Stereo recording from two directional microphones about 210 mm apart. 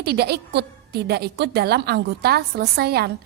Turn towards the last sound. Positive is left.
turn(degrees=-50)  # may be behind; listen again after turning